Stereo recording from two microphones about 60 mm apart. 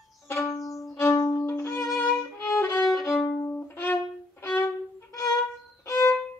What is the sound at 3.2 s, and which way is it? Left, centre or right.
Music, left.